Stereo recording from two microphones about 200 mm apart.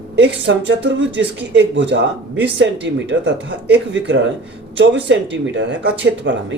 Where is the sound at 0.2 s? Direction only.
65° right (ahead or behind).